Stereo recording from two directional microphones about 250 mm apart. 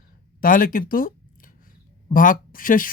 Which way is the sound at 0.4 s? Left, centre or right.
Left.